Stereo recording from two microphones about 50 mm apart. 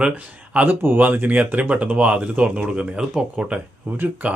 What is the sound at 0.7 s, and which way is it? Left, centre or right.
Speech, right.